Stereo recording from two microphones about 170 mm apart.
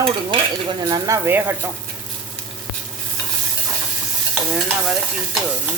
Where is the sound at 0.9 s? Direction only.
15° right (ahead or behind).